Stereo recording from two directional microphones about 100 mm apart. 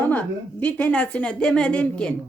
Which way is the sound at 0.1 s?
15° left (ahead or behind).